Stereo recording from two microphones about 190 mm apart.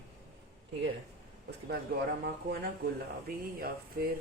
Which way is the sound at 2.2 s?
55° right (ahead or behind).